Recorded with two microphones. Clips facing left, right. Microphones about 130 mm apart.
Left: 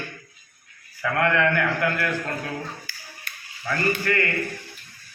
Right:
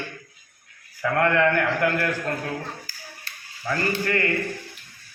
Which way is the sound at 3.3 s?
30° right (ahead or behind).